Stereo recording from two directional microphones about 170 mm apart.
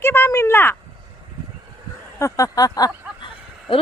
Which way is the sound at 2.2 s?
20° left (ahead or behind).